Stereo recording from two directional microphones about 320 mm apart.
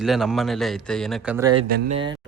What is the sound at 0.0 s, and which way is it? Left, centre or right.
Speech, centre.